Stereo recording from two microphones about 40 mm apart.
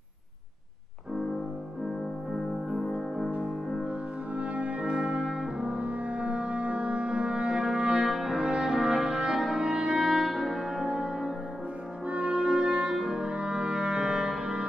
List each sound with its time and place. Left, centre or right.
4.4 s brass instrument: right
5.6 s music: right
10.0 s music: centre
12.1 s french horn: right
12.9 s music: centre